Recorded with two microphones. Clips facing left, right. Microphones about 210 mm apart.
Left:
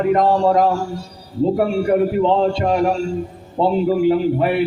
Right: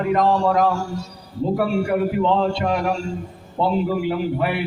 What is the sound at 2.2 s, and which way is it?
Speech, 35° left (ahead or behind).